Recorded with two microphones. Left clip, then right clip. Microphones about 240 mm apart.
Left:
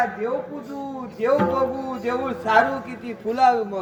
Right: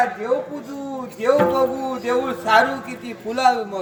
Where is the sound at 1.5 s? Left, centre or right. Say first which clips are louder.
Right 3 dB; centre.